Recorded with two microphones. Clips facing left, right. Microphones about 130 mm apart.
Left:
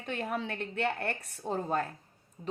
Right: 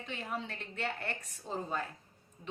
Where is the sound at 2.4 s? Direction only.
40° left (ahead or behind).